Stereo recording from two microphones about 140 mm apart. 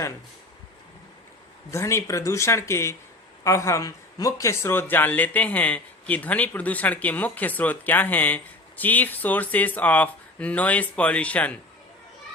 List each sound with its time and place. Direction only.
1.7 s speech: 20° left (ahead or behind)